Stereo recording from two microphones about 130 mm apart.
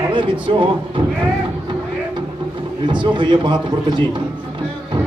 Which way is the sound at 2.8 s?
35° right (ahead or behind).